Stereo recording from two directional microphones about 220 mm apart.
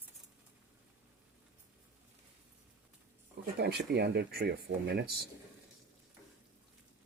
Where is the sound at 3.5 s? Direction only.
45° right (ahead or behind).